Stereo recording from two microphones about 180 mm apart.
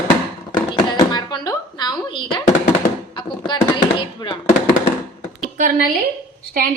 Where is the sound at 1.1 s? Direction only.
25° left (ahead or behind).